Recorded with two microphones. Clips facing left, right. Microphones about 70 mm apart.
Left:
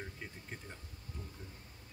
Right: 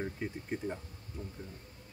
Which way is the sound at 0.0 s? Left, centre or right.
Centre.